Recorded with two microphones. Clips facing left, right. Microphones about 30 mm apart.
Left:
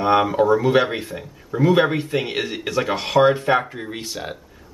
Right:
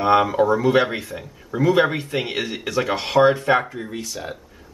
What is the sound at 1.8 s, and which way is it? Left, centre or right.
Speech, centre.